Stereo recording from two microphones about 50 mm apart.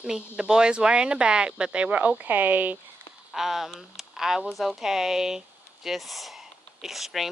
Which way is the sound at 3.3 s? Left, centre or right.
Centre.